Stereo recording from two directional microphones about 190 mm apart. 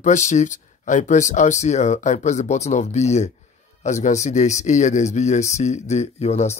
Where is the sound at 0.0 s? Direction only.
40° left (ahead or behind).